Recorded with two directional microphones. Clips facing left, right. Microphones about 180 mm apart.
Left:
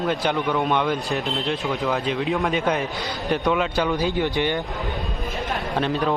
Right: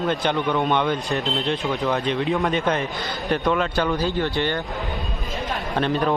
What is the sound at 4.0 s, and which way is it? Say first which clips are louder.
Speech: left 1 dB; 15° left (ahead or behind).